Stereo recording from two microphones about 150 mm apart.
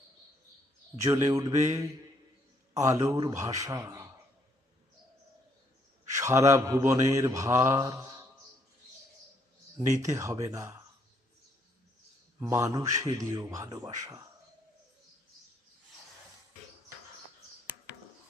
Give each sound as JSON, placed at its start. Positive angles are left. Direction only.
{"t": 1.0, "sound": "mantra", "side_deg": -20}
{"t": 6.1, "sound": "mantra", "side_deg": -20}
{"t": 10.0, "sound": "mantra", "side_deg": -20}
{"t": 12.4, "sound": "mantra", "side_deg": -20}